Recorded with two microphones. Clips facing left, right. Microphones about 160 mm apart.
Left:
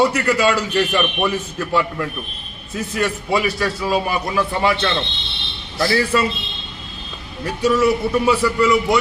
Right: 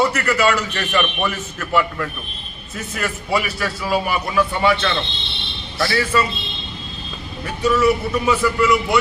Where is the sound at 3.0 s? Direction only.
30° left (ahead or behind).